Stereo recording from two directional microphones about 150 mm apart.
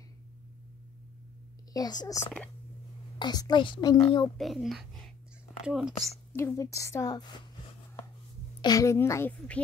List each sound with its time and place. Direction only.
1.7 s a woman's voice: 25° left (ahead or behind)
4.4 s speech: centre (ahead or behind)
6.3 s a woman's voice: 20° left (ahead or behind)
8.5 s a woman's voice: 25° left (ahead or behind)